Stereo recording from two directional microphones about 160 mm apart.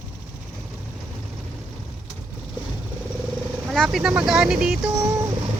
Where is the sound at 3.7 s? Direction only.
Centre (ahead or behind).